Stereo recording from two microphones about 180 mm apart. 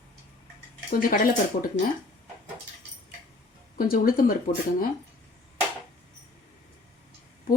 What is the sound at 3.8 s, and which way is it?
Speech, 50° left (ahead or behind).